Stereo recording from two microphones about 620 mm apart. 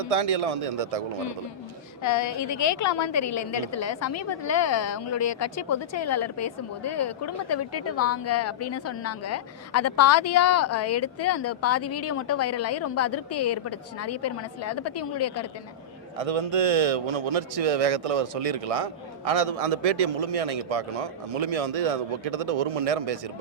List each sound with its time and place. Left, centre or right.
0.0 s a man's voice: right
2.0 s a woman's voice: left
16.1 s a man's voice: right